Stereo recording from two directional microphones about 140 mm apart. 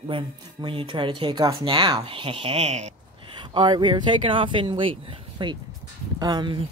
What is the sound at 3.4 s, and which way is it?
Speech, 30° right (ahead or behind).